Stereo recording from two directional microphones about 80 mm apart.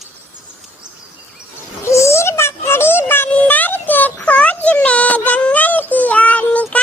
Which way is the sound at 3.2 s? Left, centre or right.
Centre.